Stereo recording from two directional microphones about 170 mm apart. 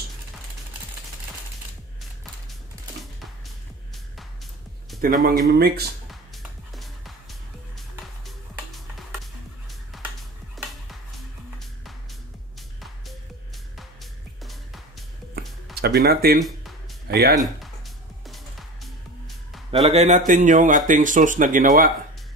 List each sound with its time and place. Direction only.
5.0 s speech: 60° right (ahead or behind)
6.3 s music: centre (ahead or behind)
14.4 s music: centre (ahead or behind)
15.7 s speech: 70° right (ahead or behind)
16.3 s speech: centre (ahead or behind)
17.1 s speech: 65° right (ahead or behind)
18.2 s music: centre (ahead or behind)
19.7 s speech: 35° right (ahead or behind); by 21.9 s 55° right (ahead or behind)